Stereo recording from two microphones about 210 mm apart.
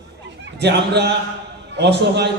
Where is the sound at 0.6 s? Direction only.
55° right (ahead or behind).